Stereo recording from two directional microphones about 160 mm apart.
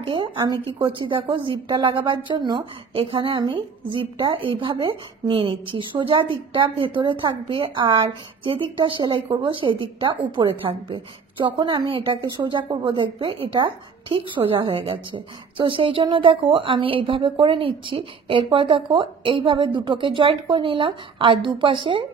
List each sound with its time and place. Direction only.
0.0 s a woman's voice: 30° right (ahead or behind)